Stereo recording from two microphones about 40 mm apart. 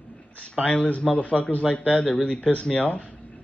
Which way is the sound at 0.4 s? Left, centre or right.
Left.